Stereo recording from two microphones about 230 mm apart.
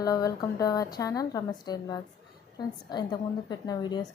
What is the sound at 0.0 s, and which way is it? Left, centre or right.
A woman's voice, centre.